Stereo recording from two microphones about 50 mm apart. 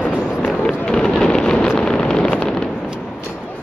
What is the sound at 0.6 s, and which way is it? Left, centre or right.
Fireworks, centre.